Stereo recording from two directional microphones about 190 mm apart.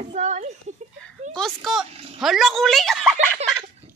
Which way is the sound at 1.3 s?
Centre (ahead or behind).